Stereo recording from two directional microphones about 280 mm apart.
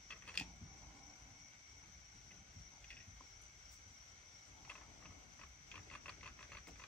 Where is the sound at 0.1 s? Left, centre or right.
Centre.